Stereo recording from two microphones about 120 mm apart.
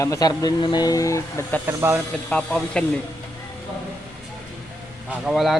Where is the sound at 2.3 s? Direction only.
5° left (ahead or behind).